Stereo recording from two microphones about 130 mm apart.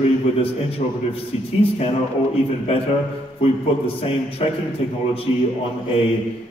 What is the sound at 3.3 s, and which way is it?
A man's voice, 45° left (ahead or behind).